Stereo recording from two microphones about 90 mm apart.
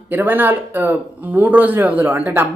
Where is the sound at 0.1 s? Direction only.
20° right (ahead or behind).